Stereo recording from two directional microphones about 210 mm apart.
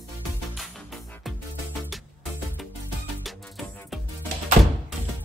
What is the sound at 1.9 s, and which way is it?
Music, centre (ahead or behind).